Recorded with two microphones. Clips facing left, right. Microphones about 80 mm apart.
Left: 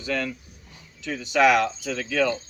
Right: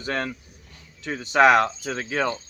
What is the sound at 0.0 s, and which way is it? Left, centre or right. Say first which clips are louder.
Speech: even; right.